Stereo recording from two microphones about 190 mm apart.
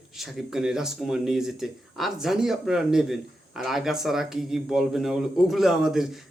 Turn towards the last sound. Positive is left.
turn(degrees=0)  # may be behind; listen again after turning